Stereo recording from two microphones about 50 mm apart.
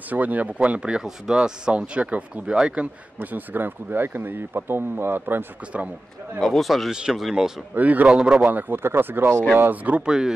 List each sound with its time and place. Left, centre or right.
0.1 s speech: right
0.7 s speech: right
3.2 s speech: right
6.4 s speech: centre
6.9 s speech: centre
7.7 s speech: right
8.1 s speech: centre
8.5 s speech: right
9.7 s speech: right
10.0 s speech: centre